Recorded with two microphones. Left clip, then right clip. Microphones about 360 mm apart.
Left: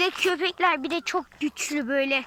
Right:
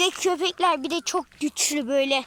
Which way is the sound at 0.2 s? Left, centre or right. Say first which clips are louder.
Even; centre.